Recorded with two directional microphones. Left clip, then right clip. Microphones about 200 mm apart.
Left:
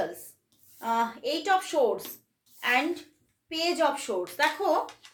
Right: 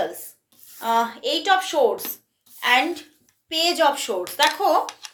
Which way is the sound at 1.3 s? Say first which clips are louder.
Right 7 dB; 10° left (ahead or behind).